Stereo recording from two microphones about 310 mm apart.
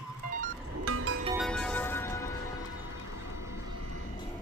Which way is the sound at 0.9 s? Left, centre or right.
Right.